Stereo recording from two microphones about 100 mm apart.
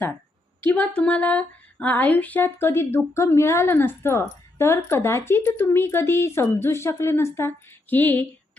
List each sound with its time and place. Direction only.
0.6 s a woman's voice: 15° left (ahead or behind)